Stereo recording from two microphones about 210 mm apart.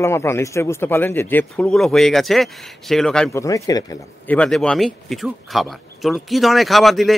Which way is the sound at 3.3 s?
15° left (ahead or behind).